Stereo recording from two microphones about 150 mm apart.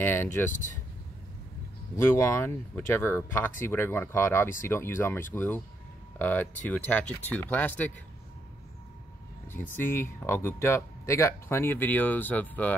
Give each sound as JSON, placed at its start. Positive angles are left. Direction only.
{"t": 0.0, "sound": "speech", "side_deg": 15}
{"t": 2.1, "sound": "speech", "side_deg": 20}
{"t": 9.8, "sound": "speech", "side_deg": 15}